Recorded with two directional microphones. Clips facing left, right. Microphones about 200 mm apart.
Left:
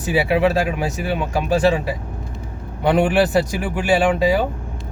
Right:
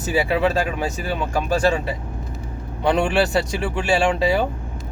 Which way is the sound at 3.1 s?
20° left (ahead or behind).